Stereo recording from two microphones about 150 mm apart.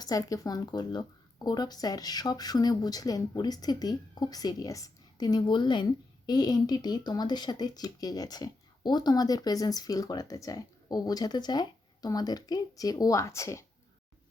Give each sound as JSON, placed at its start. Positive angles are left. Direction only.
{"t": 0.0, "sound": "speech", "side_deg": 25}